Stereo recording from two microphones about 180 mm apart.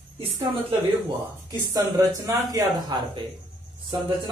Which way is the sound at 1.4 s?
20° right (ahead or behind).